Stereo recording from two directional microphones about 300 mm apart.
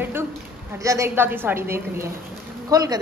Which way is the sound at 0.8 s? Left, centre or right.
Centre.